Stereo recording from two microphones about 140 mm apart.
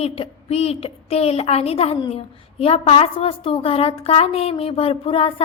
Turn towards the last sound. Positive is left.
turn(degrees=45)  # may be behind; listen again after turning